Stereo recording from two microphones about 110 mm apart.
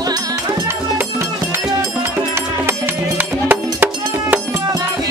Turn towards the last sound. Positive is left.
turn(degrees=-15)  # may be behind; listen again after turning